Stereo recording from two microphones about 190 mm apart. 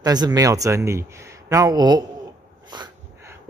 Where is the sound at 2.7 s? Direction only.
20° right (ahead or behind).